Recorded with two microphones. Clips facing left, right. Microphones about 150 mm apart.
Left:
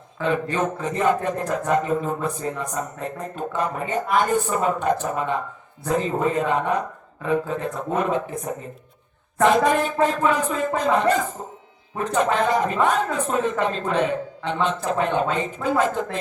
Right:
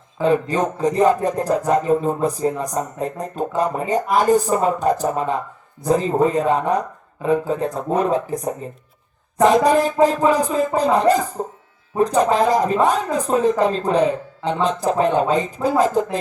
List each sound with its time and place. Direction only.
0.5 s speech: 35° right (ahead or behind)
9.6 s speech: 35° right (ahead or behind)